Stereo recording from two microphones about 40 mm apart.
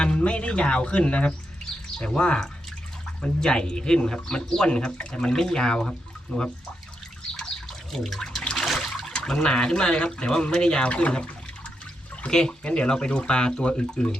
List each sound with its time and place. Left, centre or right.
0.0 s speech: left
7.9 s speech: centre
8.5 s trickle: centre
9.0 s speech: centre
10.8 s speech: left
12.3 s speech: centre